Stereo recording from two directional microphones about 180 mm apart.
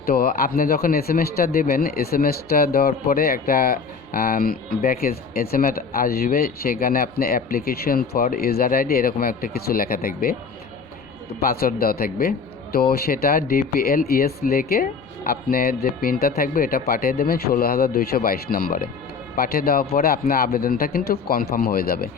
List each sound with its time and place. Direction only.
0.0 s speech: 55° left (ahead or behind)
11.4 s speech: 55° left (ahead or behind)